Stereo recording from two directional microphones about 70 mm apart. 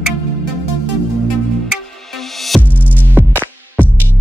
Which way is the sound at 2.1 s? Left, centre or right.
Centre.